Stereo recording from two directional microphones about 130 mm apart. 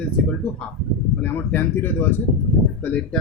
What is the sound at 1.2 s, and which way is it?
Speech, 20° left (ahead or behind).